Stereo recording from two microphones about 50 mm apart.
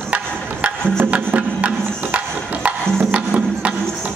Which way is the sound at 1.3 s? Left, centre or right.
Right.